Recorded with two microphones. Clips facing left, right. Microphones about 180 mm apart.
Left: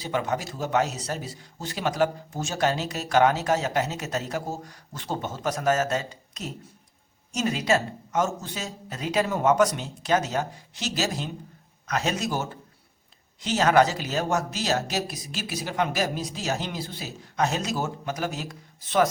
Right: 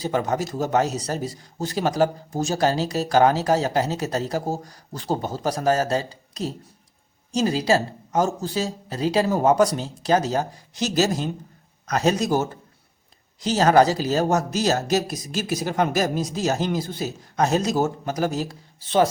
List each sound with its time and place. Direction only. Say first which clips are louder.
0.0 s a man's voice: right 4 dB; 40° right (ahead or behind)